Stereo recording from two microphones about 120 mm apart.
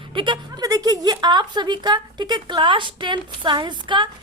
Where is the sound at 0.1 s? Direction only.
40° right (ahead or behind).